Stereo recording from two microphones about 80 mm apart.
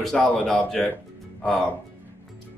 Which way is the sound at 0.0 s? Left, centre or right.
Centre.